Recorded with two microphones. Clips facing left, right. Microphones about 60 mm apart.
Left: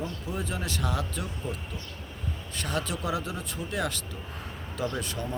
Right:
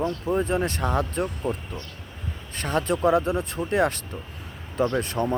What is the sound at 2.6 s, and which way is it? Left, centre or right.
Speech, right.